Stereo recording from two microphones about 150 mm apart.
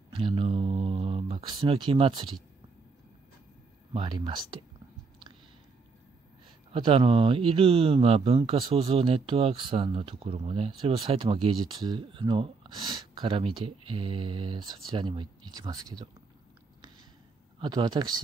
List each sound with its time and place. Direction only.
0.1 s speech: 35° right (ahead or behind)
3.9 s speech: 35° right (ahead or behind)
6.7 s speech: 35° right (ahead or behind)
17.6 s speech: 30° right (ahead or behind)